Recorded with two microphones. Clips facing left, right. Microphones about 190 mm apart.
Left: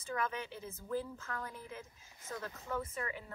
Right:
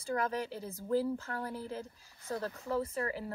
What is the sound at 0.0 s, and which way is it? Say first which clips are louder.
A woman's voice: right 5 dB; 35° right (ahead or behind).